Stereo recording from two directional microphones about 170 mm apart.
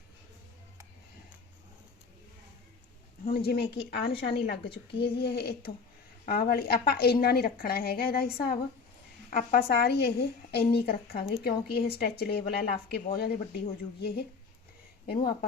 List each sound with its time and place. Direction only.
3.2 s a woman's voice: 65° left (ahead or behind)